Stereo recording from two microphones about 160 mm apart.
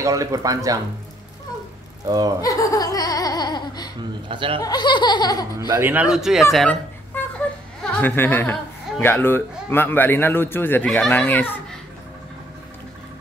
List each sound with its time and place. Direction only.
0.0 s speech: 20° right (ahead or behind)
2.0 s speech: 25° right (ahead or behind)
2.4 s laughter: 20° left (ahead or behind)
4.3 s speech: 30° right (ahead or behind)
4.6 s speech: 25° left (ahead or behind)
5.8 s speech: 10° right (ahead or behind); by 11.5 s 10° left (ahead or behind)